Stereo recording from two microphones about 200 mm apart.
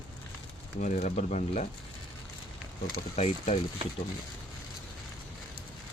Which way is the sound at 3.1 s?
30° left (ahead or behind).